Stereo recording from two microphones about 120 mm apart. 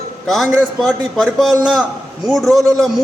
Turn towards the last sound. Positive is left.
turn(degrees=0)  # may be behind; listen again after turning